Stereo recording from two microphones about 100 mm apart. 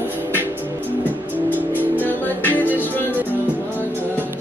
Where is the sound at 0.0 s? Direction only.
20° right (ahead or behind).